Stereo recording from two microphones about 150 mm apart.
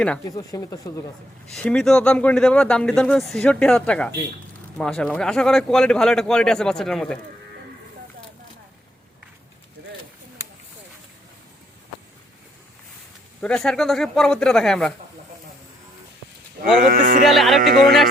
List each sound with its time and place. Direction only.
0.3 s speech: 25° left (ahead or behind)
1.5 s speech: 5° left (ahead or behind)
13.4 s speech: 5° left (ahead or behind)
16.9 s music: 60° right (ahead or behind)
17.2 s speech: centre (ahead or behind)